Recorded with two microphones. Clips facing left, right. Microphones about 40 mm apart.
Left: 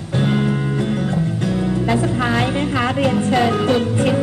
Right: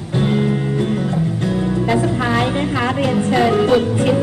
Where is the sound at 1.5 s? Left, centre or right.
Centre.